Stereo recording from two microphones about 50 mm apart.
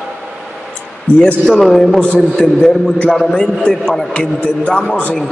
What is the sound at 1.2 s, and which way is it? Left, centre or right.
Speech, left.